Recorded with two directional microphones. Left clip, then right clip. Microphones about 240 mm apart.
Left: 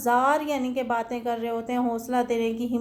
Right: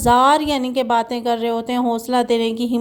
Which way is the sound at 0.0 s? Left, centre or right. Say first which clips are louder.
Right 8 dB; right.